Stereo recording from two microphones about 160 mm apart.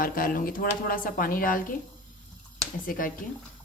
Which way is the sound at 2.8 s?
60° left (ahead or behind).